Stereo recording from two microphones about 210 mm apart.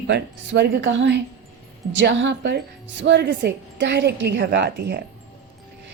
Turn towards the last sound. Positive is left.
turn(degrees=-55)  # may be behind; listen again after turning